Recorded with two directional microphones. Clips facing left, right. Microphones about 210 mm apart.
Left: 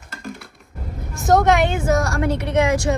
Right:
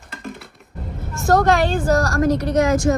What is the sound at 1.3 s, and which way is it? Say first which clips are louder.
A woman's voice: even; 20° left (ahead or behind).